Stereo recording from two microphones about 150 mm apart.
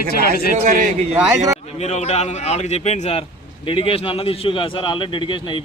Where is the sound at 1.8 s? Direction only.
50° left (ahead or behind).